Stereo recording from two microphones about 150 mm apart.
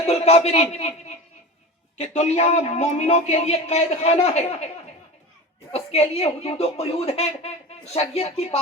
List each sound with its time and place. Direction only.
0.1 s a man's voice: 45° left (ahead or behind)
5.7 s a man's voice: 45° left (ahead or behind)